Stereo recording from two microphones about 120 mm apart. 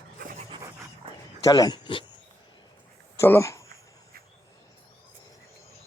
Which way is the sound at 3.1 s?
20° left (ahead or behind).